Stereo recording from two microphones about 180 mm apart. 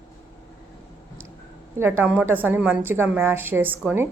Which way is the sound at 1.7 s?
15° right (ahead or behind).